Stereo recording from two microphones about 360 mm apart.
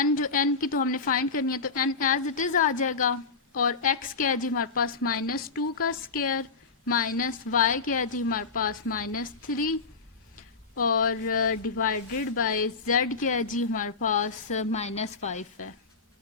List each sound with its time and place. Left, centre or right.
0.0 s a woman's voice: left
6.8 s a woman's voice: left
10.8 s a woman's voice: left